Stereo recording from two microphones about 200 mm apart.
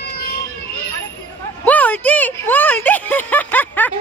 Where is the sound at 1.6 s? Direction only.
10° left (ahead or behind).